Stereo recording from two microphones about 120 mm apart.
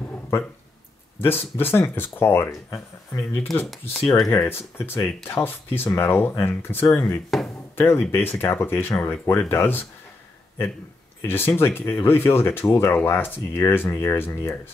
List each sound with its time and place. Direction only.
0.0 s a sound: 20° left (ahead or behind)
1.2 s speech: 20° left (ahead or behind)
4.3 s speech: 20° left (ahead or behind)
7.2 s speech: centre (ahead or behind)
7.7 s speech: 20° left (ahead or behind)
11.2 s speech: 20° left (ahead or behind)